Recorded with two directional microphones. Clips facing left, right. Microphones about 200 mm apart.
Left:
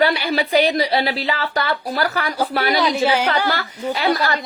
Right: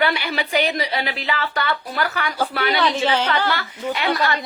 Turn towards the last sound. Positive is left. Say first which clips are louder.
# left 2 dB
turn(degrees=40)  # may be behind; listen again after turning